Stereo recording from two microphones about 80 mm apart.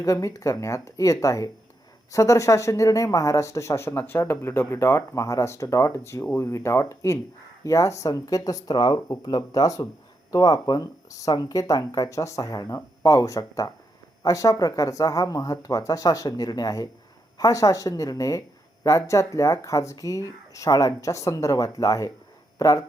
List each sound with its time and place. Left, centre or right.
0.0 s speech: left